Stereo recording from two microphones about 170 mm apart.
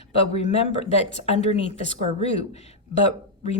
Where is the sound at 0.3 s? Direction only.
40° left (ahead or behind).